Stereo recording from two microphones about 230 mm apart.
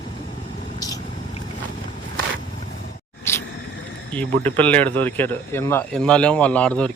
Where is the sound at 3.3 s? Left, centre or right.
Centre.